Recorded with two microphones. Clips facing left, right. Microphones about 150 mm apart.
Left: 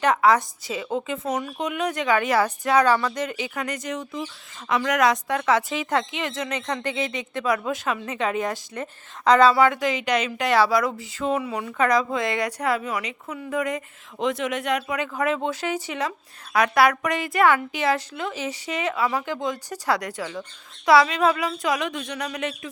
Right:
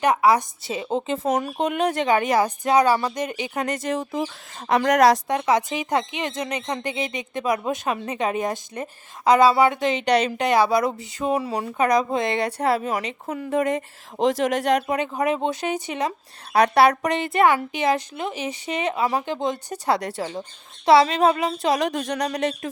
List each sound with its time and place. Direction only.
0.0 s a woman's voice: 10° right (ahead or behind)
0.6 s a woman's voice: 25° right (ahead or behind)
1.3 s speech: 40° right (ahead or behind)
1.8 s a woman's voice: 30° right (ahead or behind)
5.3 s a woman's voice: 20° right (ahead or behind)
6.6 s a woman's voice: 30° right (ahead or behind)
6.8 s a woman's voice: 15° right (ahead or behind)
9.2 s a woman's voice: 10° right (ahead or behind); by 10.4 s 35° right (ahead or behind)
10.4 s a woman's voice: 20° right (ahead or behind)
11.3 s speech: 40° right (ahead or behind)
11.8 s a woman's voice: 20° right (ahead or behind); by 14.9 s 35° right (ahead or behind)
14.9 s a woman's voice: 20° right (ahead or behind)
16.5 s a woman's voice: 30° right (ahead or behind)